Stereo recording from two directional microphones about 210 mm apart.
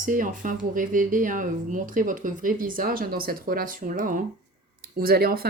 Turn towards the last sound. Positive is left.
turn(degrees=-45)  # may be behind; listen again after turning